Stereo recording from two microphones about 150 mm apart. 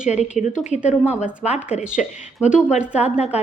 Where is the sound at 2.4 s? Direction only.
5° right (ahead or behind).